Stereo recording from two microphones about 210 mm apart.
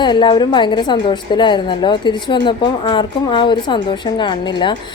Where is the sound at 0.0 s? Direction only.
20° left (ahead or behind).